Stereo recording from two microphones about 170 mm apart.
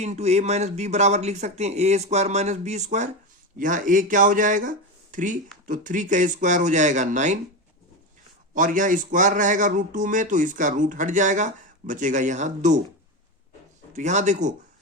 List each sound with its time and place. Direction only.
0.0 s a man's voice: 40° right (ahead or behind)
8.5 s a man's voice: 50° right (ahead or behind)
13.9 s a man's voice: 45° right (ahead or behind)